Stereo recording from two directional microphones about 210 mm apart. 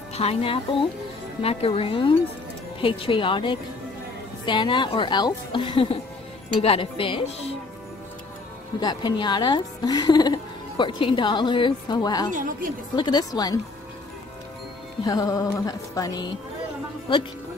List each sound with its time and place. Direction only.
0.1 s speech: 30° left (ahead or behind)
8.7 s speech: 20° left (ahead or behind)
12.3 s speech: 40° right (ahead or behind)
12.9 s speech: 20° left (ahead or behind)
15.0 s speech: 15° left (ahead or behind)